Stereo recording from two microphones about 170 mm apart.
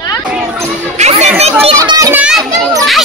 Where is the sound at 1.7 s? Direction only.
20° right (ahead or behind).